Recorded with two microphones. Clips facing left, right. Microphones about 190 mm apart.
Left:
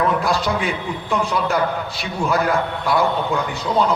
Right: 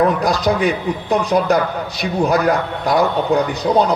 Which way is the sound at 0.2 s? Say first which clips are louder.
Right 4 dB; 40° right (ahead or behind).